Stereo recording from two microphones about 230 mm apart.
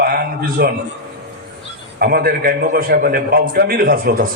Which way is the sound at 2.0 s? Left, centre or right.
Right.